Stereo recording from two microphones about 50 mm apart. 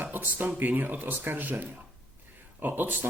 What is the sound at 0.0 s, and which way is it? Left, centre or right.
Speech, right.